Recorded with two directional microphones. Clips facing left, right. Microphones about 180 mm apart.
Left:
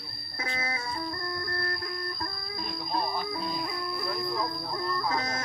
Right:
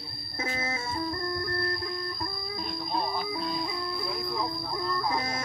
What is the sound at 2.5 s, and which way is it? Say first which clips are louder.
Music: even; centre (ahead or behind).